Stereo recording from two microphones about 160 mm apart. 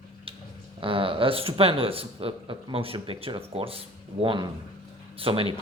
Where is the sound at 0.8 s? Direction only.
35° right (ahead or behind).